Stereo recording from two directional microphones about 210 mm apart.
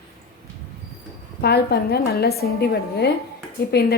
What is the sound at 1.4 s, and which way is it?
A woman's voice, 50° left (ahead or behind).